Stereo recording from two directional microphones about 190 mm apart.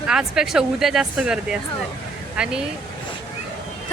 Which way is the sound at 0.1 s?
5° right (ahead or behind).